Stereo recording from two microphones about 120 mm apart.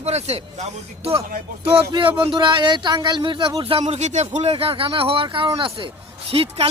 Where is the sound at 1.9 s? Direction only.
45° right (ahead or behind).